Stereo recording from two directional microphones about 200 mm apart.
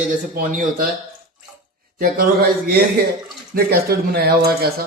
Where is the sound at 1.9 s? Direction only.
45° right (ahead or behind).